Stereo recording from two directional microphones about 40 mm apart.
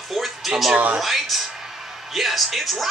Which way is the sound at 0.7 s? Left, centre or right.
Right.